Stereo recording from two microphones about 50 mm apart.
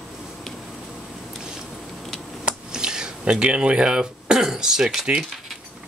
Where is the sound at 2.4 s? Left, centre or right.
Centre.